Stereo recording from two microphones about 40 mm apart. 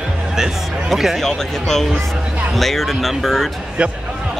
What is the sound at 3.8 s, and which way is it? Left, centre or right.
Speech, right.